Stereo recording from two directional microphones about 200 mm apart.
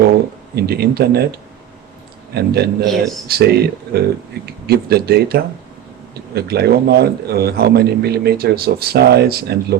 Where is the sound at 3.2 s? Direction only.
50° right (ahead or behind).